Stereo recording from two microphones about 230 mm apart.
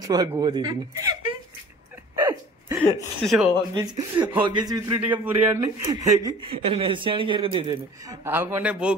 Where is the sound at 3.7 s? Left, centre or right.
Centre.